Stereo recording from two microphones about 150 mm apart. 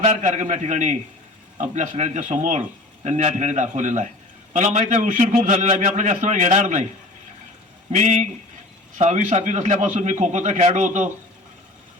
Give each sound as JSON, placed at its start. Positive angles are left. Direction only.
{"t": 0.0, "sound": "a man's voice", "side_deg": -55}
{"t": 7.9, "sound": "a man's voice", "side_deg": -50}